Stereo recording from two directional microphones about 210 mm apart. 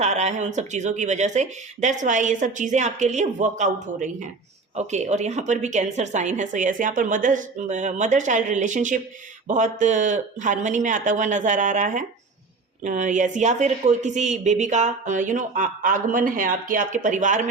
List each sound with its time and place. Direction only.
0.0 s speech: 30° right (ahead or behind)